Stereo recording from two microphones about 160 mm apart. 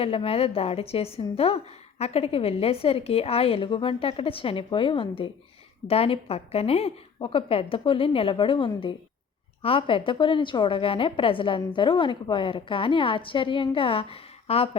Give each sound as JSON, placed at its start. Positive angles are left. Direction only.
{"t": 0.0, "sound": "a woman's voice", "side_deg": 35}